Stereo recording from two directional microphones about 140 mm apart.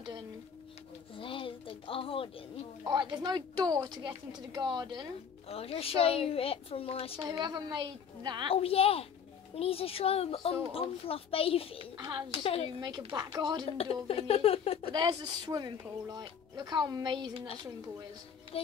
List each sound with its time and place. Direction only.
1.1 s speech: 40° left (ahead or behind)
2.8 s speech: 30° right (ahead or behind)
5.5 s a woman's voice: 45° left (ahead or behind)
7.2 s speech: 30° right (ahead or behind)
8.5 s a woman's voice: 45° left (ahead or behind)
11.8 s speech: 30° right (ahead or behind)
12.4 s a woman's voice: 45° left (ahead or behind)
12.8 s speech: 30° right (ahead or behind)
13.7 s a woman's voice: 45° left (ahead or behind)
14.9 s speech: 35° right (ahead or behind)